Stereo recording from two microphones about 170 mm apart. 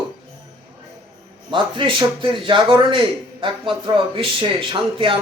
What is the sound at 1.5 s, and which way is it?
A man's voice, 30° right (ahead or behind).